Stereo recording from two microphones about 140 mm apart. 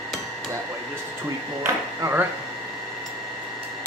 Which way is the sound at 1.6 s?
15° right (ahead or behind).